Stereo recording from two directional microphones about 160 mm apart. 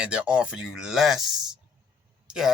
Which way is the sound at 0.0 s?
5° right (ahead or behind).